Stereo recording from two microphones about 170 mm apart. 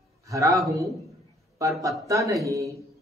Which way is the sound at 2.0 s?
20° right (ahead or behind).